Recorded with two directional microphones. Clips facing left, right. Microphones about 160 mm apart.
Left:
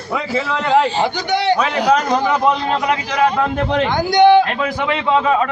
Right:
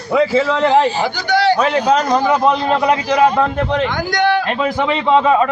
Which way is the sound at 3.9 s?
25° left (ahead or behind).